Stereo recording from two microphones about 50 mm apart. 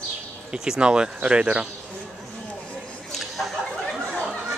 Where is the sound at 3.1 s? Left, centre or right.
Centre.